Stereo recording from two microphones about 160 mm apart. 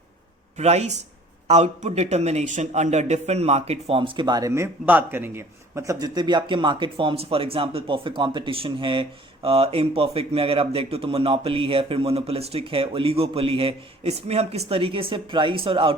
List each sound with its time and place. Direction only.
0.5 s a man's voice: 40° right (ahead or behind)